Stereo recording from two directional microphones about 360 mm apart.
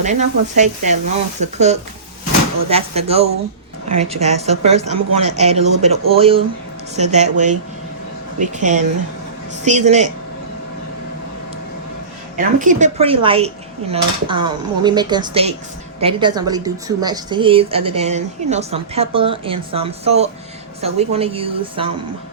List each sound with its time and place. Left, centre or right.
0.0 s a woman's voice: centre
12.4 s a woman's voice: right